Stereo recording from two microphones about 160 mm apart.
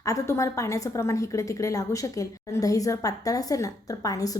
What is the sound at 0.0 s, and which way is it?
A woman's voice, 20° left (ahead or behind).